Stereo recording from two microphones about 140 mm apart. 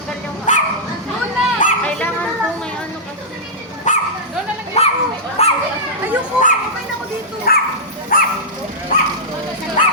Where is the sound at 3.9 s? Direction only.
65° left (ahead or behind).